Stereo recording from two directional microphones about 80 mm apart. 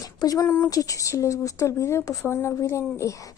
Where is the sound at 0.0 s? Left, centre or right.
Left.